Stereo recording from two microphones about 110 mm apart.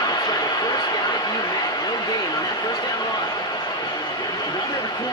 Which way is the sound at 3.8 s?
35° left (ahead or behind).